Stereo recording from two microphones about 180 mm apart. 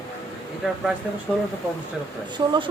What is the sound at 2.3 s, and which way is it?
Speech, 25° right (ahead or behind).